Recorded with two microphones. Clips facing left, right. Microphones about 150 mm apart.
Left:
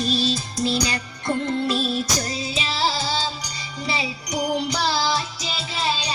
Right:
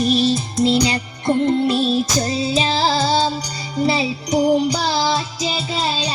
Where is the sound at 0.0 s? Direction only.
20° right (ahead or behind).